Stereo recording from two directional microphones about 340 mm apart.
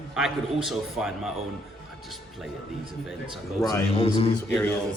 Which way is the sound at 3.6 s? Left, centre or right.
Centre.